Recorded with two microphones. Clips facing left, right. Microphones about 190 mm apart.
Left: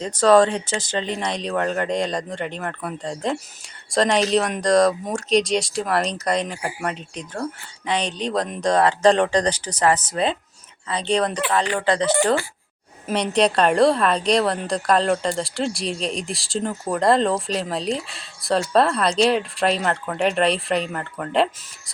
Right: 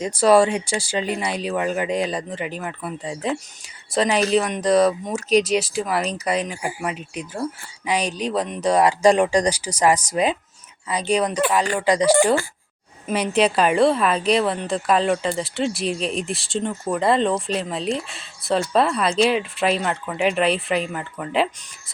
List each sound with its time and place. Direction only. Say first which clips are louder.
0.0 s a woman's voice: even; 10° right (ahead or behind)